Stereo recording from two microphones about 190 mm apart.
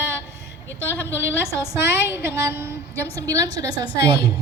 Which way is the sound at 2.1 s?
60° left (ahead or behind).